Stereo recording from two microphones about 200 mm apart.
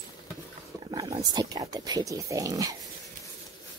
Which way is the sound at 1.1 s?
20° right (ahead or behind).